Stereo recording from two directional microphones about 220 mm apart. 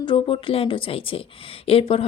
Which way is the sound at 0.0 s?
20° left (ahead or behind).